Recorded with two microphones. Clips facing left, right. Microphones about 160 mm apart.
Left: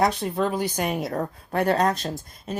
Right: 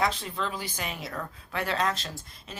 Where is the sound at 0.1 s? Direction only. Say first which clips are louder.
Left 9 dB; 50° left (ahead or behind).